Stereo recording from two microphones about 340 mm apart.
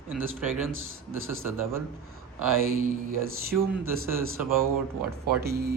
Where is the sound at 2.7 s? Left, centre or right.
Right.